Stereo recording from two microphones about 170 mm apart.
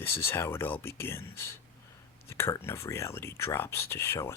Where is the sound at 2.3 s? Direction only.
15° left (ahead or behind).